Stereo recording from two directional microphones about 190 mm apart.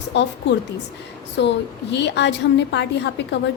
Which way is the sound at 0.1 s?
65° left (ahead or behind).